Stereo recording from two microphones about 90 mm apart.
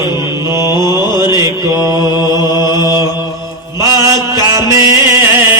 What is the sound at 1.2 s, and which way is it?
Mantra, 30° right (ahead or behind).